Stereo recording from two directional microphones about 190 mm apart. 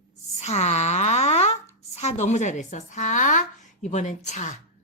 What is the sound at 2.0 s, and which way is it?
A woman's voice, 35° left (ahead or behind).